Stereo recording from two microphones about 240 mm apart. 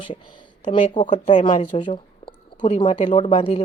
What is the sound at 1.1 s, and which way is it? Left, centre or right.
Speech, left.